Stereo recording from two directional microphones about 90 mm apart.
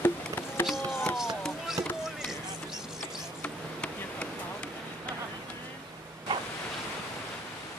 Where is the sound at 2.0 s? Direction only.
5° right (ahead or behind).